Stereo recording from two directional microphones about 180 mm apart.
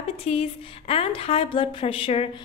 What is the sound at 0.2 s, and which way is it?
A woman's voice, 35° left (ahead or behind).